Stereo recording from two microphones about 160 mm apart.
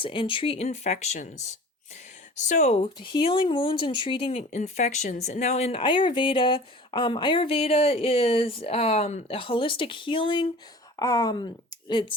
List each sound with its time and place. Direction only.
0.0 s speech: 30° left (ahead or behind)
2.3 s speech: 50° left (ahead or behind); by 12.1 s 30° left (ahead or behind)